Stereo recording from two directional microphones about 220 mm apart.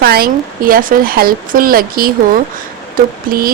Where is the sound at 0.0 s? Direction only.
45° right (ahead or behind).